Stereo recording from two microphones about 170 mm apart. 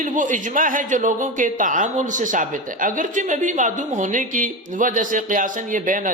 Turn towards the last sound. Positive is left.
turn(degrees=-50)  # may be behind; listen again after turning